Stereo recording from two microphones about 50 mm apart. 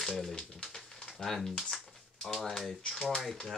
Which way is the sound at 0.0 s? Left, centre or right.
Centre.